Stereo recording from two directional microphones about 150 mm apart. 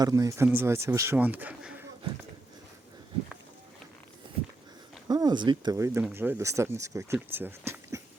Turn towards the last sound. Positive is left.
turn(degrees=-15)  # may be behind; listen again after turning